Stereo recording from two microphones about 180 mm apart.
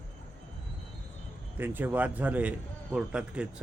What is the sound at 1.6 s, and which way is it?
A man's voice, 10° right (ahead or behind).